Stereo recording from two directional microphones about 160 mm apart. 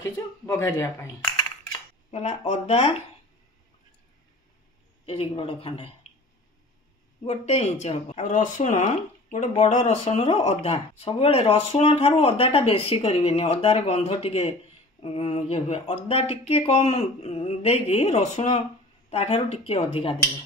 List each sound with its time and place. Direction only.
0.0 s speech: 15° left (ahead or behind)
2.0 s speech: 45° left (ahead or behind)
5.0 s speech: 35° left (ahead or behind)
7.2 s speech: 45° left (ahead or behind)